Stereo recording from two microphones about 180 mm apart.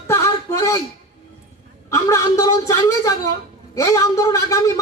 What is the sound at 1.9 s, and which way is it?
A man's voice, 20° left (ahead or behind).